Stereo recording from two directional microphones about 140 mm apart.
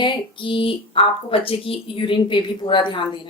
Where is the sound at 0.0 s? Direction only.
35° left (ahead or behind).